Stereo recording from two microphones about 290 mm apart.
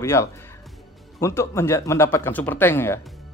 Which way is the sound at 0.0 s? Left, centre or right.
Centre.